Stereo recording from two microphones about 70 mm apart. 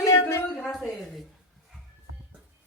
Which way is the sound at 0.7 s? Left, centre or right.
Centre.